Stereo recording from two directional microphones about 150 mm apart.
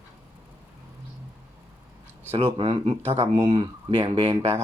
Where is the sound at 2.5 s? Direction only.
35° right (ahead or behind).